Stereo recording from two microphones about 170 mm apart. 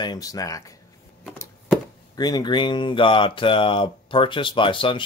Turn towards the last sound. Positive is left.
turn(degrees=30)  # may be behind; listen again after turning